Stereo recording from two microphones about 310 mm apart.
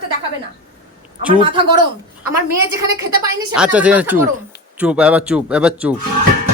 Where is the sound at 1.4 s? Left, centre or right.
Centre.